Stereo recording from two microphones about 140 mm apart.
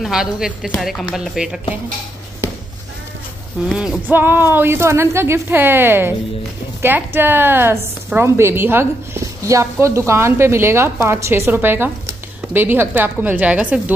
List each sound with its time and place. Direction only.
0.0 s speech: 5° right (ahead or behind)
3.6 s a woman's voice: centre (ahead or behind)